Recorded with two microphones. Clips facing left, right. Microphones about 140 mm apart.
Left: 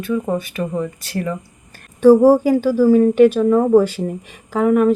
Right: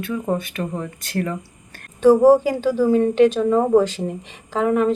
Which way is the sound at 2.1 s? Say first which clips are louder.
Left 2 dB; 15° right (ahead or behind).